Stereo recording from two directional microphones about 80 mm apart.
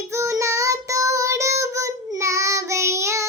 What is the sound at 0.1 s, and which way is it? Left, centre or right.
Child singing, right.